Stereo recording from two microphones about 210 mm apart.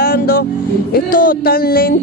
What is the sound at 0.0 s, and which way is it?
Music, 45° left (ahead or behind).